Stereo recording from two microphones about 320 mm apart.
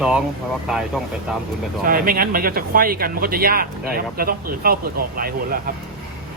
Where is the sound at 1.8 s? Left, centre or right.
Right.